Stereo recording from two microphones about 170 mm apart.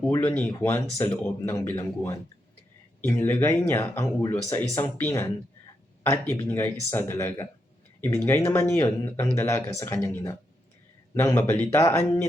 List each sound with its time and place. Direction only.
0.1 s speech: 15° left (ahead or behind)